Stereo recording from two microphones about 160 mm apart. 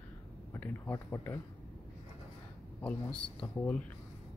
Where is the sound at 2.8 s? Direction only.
5° left (ahead or behind).